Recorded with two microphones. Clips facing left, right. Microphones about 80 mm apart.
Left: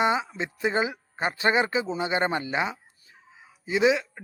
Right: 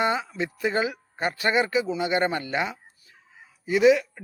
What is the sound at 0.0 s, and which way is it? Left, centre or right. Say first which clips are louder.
Speech: even; centre.